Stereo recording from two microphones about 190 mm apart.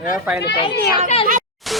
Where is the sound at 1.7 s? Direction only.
Centre (ahead or behind).